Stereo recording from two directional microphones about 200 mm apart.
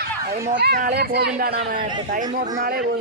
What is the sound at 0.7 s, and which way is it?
Speech, 50° right (ahead or behind).